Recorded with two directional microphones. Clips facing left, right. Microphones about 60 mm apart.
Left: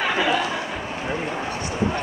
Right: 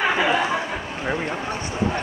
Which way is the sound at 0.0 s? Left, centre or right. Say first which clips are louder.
Right 1 dB; centre.